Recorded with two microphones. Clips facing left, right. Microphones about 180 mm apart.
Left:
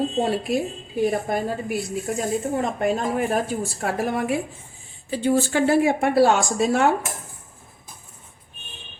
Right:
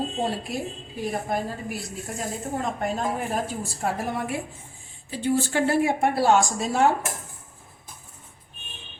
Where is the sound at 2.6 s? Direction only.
70° left (ahead or behind).